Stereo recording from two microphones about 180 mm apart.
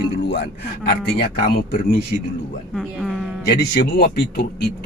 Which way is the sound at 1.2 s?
55° left (ahead or behind).